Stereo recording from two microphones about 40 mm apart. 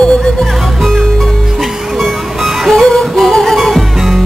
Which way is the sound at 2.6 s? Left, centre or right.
Centre.